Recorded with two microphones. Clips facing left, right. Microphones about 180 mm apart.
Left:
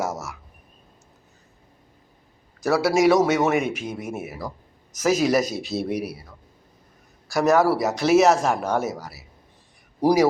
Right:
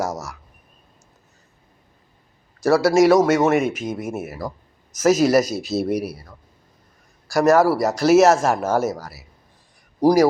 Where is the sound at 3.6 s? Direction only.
40° right (ahead or behind).